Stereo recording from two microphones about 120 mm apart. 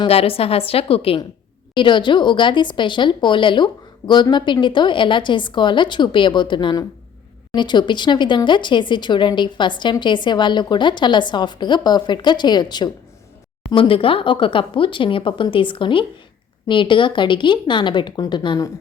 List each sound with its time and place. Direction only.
0.1 s speech: 55° left (ahead or behind)
1.7 s speech: 40° left (ahead or behind)